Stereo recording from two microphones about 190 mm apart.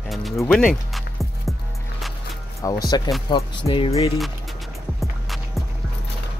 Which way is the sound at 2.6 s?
20° left (ahead or behind).